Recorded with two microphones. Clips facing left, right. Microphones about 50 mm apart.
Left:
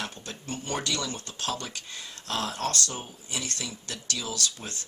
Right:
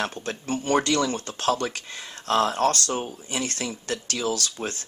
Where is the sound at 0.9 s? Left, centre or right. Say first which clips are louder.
Right 9 dB; right.